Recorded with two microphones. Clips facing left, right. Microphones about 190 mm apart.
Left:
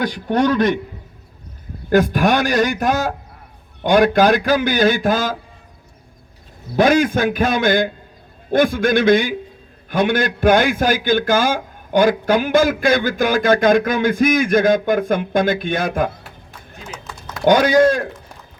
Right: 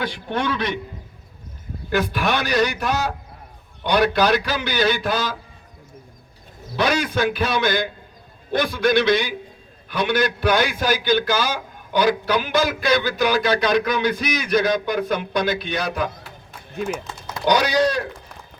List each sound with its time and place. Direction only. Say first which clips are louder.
0.0 s a man's voice: left 7 dB; 45° left (ahead or behind)
1.9 s a man's voice: left 7 dB; 45° left (ahead or behind)
6.7 s a man's voice: left 7 dB; 50° left (ahead or behind)
17.4 s a man's voice: left 6 dB; 50° left (ahead or behind)